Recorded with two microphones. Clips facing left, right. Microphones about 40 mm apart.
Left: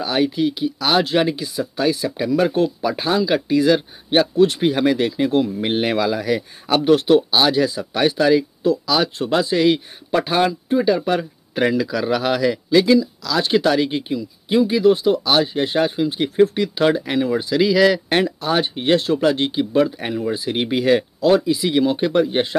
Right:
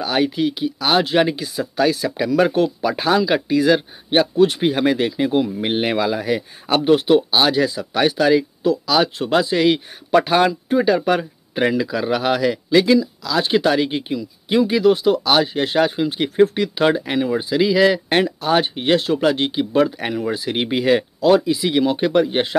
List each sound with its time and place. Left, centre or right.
0.0 s speech: right
5.9 s speech: right
7.2 s speech: right
11.7 s speech: right
14.1 s speech: right
16.8 s speech: right
18.2 s speech: right